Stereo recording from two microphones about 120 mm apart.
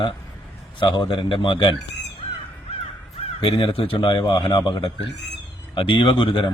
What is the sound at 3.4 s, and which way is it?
A man's voice, 45° left (ahead or behind).